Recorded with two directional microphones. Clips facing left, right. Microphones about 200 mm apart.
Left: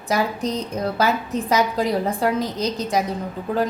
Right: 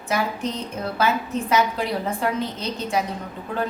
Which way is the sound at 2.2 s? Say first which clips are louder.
Left 4 dB; 40° left (ahead or behind).